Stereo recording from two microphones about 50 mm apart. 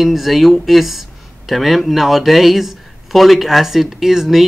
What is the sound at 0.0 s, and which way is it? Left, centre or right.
Speech, centre.